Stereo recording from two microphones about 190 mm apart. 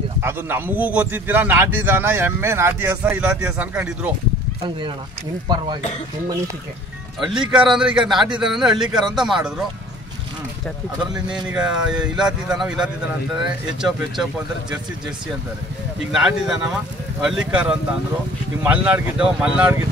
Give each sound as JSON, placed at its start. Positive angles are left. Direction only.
{"t": 0.2, "sound": "speech", "side_deg": -10}
{"t": 4.6, "sound": "speech", "side_deg": -25}
{"t": 7.2, "sound": "speech", "side_deg": -5}
{"t": 11.2, "sound": "speech", "side_deg": -5}
{"t": 16.1, "sound": "speech", "side_deg": -5}